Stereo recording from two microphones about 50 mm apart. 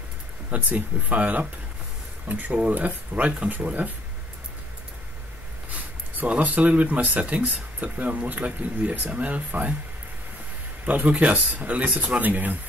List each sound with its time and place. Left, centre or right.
0.5 s speech: right
5.7 s a sound: right
6.4 s speech: right
10.9 s speech: right